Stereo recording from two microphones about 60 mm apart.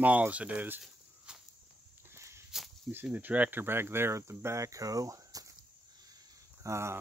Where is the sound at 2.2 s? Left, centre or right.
Right.